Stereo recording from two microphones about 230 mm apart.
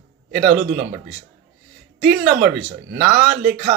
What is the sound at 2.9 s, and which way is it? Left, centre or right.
Speech, right.